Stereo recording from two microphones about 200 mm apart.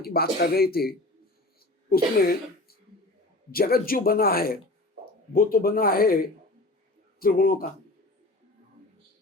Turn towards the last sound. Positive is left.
turn(degrees=45)  # may be behind; listen again after turning